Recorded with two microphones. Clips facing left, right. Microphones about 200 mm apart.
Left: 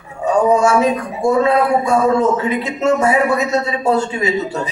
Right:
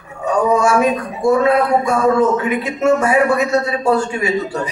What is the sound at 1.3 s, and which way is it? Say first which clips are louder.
A man's voice: right 1 dB; 25° left (ahead or behind).